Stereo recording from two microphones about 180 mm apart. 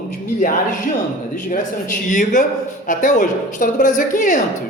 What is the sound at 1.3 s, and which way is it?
A woman's voice, 50° left (ahead or behind).